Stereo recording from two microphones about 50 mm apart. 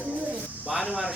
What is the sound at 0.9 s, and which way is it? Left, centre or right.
Speech, right.